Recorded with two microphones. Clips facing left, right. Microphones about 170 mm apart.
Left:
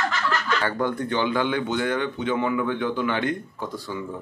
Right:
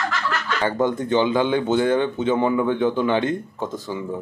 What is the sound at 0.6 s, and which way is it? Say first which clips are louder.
Speech: right 4 dB; 20° right (ahead or behind).